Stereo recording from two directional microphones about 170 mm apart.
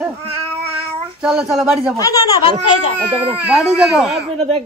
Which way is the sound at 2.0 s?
20° left (ahead or behind).